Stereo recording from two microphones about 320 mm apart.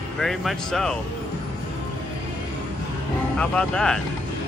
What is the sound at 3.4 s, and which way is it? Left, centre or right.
Speech, centre.